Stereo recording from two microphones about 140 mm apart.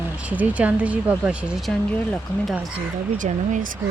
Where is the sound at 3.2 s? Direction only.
70° right (ahead or behind).